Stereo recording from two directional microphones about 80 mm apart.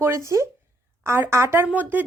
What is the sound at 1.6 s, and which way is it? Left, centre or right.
Speech, right.